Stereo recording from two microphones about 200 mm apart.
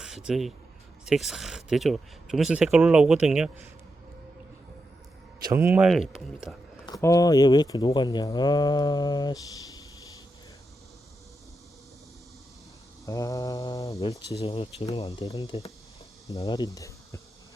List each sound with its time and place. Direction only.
0.0 s speech: 5° right (ahead or behind)
5.4 s speech: 15° right (ahead or behind)
6.8 s speech: 15° left (ahead or behind)
13.1 s mantra: 15° left (ahead or behind)
14.1 s speech: 25° left (ahead or behind)